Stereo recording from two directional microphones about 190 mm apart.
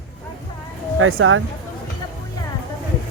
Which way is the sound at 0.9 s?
90° right.